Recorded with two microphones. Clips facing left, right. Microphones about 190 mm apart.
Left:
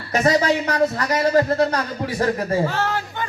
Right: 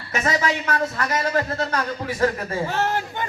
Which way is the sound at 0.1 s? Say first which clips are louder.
Left 5 dB; 35° left (ahead or behind).